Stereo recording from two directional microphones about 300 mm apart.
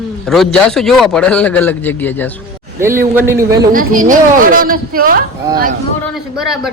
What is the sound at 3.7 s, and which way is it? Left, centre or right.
A woman's voice, right.